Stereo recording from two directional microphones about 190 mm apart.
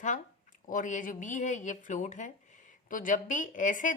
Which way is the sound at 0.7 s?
40° left (ahead or behind).